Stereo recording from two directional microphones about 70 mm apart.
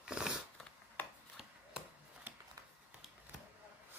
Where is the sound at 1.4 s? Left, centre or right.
Centre.